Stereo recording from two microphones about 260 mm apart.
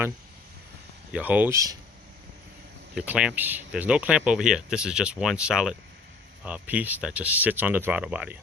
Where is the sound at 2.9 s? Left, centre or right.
Centre.